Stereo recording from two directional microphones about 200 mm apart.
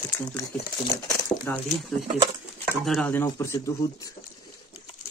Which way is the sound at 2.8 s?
5° left (ahead or behind).